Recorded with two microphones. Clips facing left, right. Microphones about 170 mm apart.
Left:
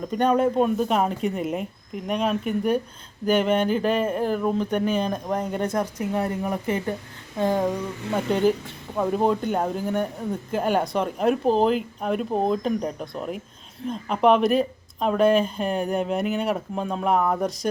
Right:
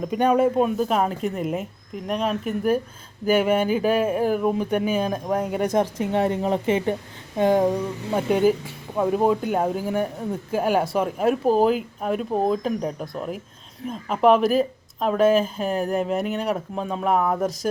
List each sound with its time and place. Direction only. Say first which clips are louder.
0.1 s a woman's voice: right 1 dB; 5° right (ahead or behind)
5.7 s a woman's voice: right 4 dB; 25° right (ahead or behind); by 17.7 s centre (ahead or behind)